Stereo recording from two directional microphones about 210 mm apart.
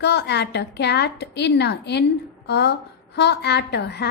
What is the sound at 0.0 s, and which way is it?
A woman's voice, 55° left (ahead or behind).